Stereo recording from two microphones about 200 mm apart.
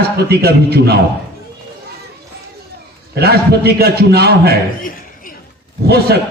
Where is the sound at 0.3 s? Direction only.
55° right (ahead or behind).